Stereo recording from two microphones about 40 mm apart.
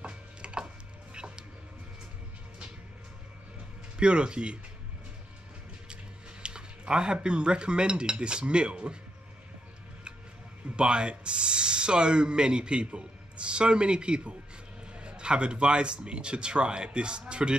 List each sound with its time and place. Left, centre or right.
0.0 s chopping: right
1.1 s a sound: right
4.0 s speech: right
6.4 s music: right
7.2 s speech: right
10.8 s speech: right